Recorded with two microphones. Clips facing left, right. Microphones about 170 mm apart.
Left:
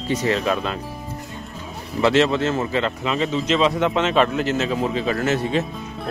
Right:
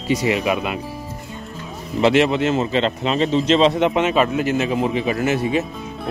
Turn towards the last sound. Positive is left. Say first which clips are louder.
# right 2 dB
turn(degrees=-10)  # may be behind; listen again after turning